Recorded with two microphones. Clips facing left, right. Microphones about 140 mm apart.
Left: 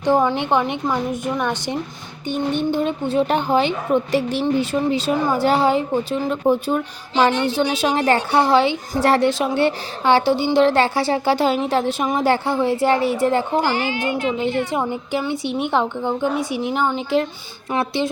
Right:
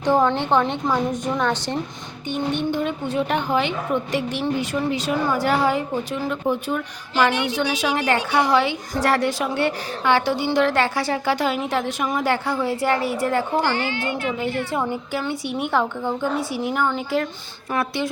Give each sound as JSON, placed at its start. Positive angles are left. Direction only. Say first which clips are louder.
{"t": 0.1, "sound": "a woman's voice", "louder": "left 1 dB", "side_deg": 10}
{"t": 2.6, "sound": "a woman's voice", "louder": "left 3 dB", "side_deg": 30}